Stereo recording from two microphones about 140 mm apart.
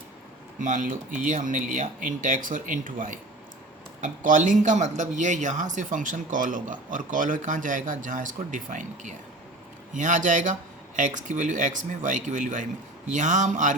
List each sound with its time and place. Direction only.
0.6 s speech: 65° right (ahead or behind)